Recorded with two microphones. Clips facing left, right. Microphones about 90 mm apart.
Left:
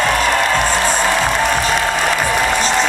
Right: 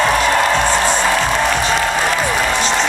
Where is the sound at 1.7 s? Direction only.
5° left (ahead or behind).